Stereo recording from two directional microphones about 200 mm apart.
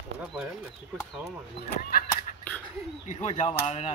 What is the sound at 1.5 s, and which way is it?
Honk, 50° left (ahead or behind).